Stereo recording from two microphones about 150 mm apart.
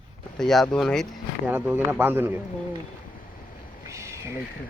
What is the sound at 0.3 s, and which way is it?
Speech, centre (ahead or behind).